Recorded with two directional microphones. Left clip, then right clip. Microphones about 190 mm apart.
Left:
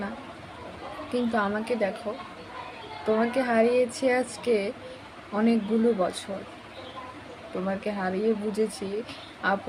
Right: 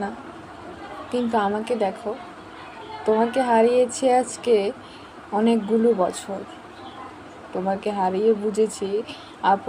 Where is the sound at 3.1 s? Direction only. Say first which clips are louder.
Right 5 dB; 15° left (ahead or behind).